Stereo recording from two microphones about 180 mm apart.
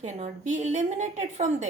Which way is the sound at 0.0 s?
40° right (ahead or behind).